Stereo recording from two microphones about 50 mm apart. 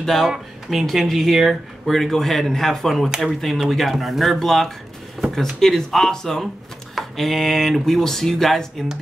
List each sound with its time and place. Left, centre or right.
0.0 s speech: centre